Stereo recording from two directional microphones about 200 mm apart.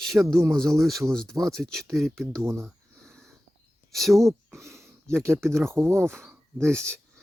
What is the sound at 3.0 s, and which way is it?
Wheeze, 5° left (ahead or behind).